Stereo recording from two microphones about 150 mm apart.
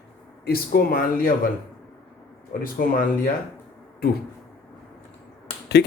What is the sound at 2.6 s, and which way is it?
Speech, 70° left (ahead or behind).